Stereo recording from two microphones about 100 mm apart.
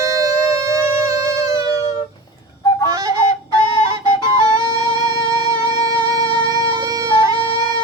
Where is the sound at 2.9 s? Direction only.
35° right (ahead or behind).